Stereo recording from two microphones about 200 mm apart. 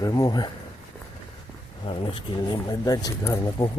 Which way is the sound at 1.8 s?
25° left (ahead or behind).